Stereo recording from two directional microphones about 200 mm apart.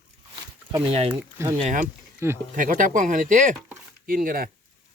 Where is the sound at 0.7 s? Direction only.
25° right (ahead or behind); by 4.5 s 45° right (ahead or behind).